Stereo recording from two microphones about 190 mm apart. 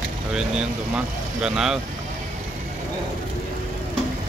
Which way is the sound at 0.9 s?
5° right (ahead or behind).